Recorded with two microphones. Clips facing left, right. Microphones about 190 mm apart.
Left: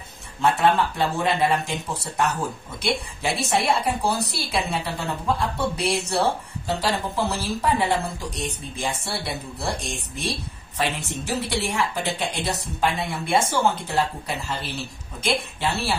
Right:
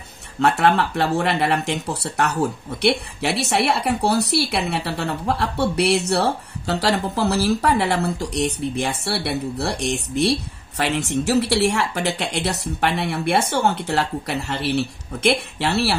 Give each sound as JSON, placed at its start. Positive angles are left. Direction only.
{"t": 0.4, "sound": "a woman's voice", "side_deg": -70}